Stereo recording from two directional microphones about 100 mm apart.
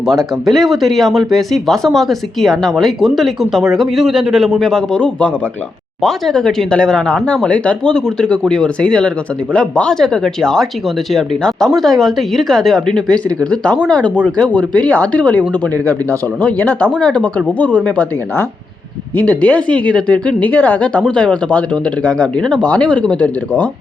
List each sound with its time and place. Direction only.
0.4 s speech: centre (ahead or behind)